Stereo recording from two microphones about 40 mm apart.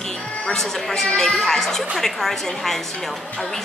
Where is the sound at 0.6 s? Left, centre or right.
Centre.